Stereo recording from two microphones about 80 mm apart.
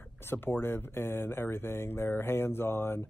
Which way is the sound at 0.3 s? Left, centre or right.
Left.